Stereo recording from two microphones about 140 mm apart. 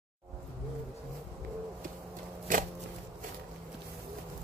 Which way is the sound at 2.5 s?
70° right (ahead or behind).